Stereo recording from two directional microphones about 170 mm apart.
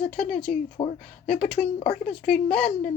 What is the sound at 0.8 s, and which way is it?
Speech, 30° left (ahead or behind).